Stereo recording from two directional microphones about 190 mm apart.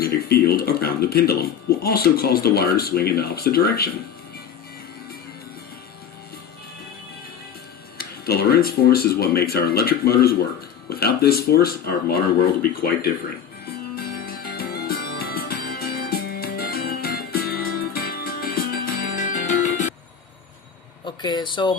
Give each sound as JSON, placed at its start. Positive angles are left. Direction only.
{"t": 0.0, "sound": "speech", "side_deg": 55}
{"t": 7.9, "sound": "speech", "side_deg": 55}
{"t": 13.9, "sound": "music", "side_deg": 55}
{"t": 21.0, "sound": "speech", "side_deg": 20}